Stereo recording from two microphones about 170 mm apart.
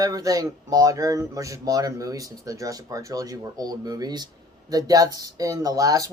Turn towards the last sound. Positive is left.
turn(degrees=-20)  # may be behind; listen again after turning